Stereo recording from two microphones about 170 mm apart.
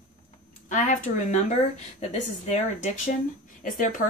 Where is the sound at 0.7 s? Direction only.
45° left (ahead or behind).